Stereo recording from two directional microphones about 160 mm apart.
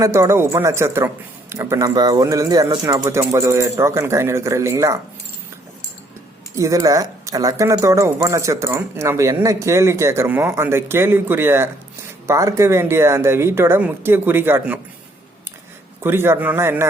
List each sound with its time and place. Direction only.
0.0 s speech: 15° right (ahead or behind)
6.6 s speech: 20° right (ahead or behind)
16.0 s speech: 15° right (ahead or behind)